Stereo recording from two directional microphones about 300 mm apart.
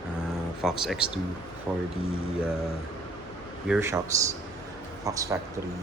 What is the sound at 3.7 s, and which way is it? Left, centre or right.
Speech, centre.